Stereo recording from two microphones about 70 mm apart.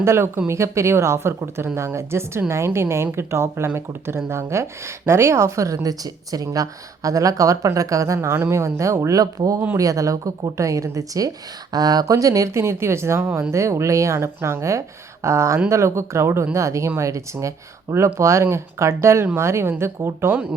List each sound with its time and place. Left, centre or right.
0.0 s speech: right
11.7 s speech: right
12.5 s speech: right